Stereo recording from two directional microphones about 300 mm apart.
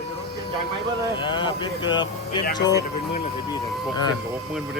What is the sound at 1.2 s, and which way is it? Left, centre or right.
Speech, centre.